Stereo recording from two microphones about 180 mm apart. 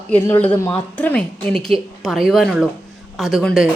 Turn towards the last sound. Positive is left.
turn(degrees=0)  # may be behind; listen again after turning